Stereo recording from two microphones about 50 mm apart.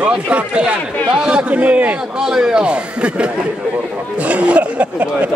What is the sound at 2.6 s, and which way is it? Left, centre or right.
Speech, right.